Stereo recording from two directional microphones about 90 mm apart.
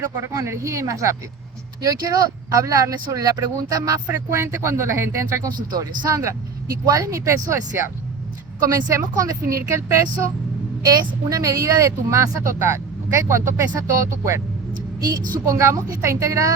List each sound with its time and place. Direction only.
0.3 s speech: 35° right (ahead or behind)
4.0 s speech: 25° right (ahead or behind)
5.7 s speech: 40° right (ahead or behind)
15.1 s speech: 30° right (ahead or behind)